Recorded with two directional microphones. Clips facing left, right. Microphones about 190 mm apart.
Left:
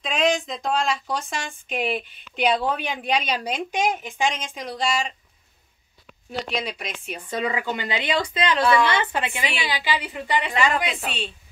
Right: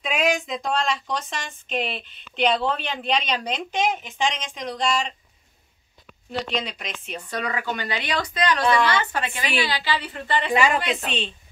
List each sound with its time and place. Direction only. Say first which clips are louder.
0.0 s speech: left 1 dB; 5° right (ahead or behind)
6.5 s speech: even; 10° left (ahead or behind)
7.2 s a woman's voice: left 2 dB; 25° left (ahead or behind); by 11.3 s 5° left (ahead or behind)